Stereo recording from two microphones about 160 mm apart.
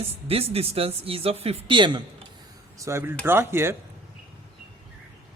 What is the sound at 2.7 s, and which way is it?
Speech, 20° right (ahead or behind).